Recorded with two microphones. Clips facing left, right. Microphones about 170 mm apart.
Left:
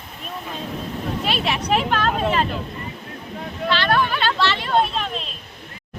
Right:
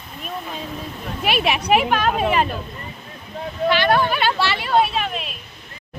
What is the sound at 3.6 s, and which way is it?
Speech, 15° right (ahead or behind).